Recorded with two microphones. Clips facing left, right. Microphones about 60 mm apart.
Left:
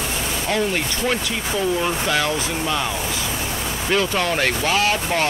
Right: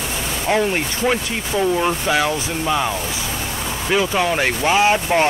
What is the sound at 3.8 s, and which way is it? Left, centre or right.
Speech, centre.